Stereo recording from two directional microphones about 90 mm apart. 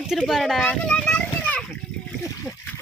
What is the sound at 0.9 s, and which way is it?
Children playing, 15° left (ahead or behind).